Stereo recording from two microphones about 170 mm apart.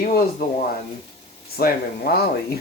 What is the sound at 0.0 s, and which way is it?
Speech, 55° left (ahead or behind).